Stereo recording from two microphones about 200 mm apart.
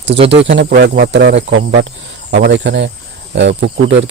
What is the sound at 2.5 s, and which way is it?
Speech, 65° right (ahead or behind).